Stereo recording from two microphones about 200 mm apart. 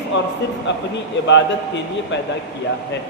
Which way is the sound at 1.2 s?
65° left (ahead or behind).